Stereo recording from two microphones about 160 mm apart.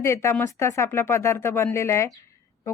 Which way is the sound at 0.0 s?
15° left (ahead or behind).